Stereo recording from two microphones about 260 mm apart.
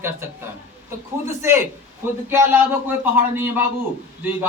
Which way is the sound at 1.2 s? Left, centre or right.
Centre.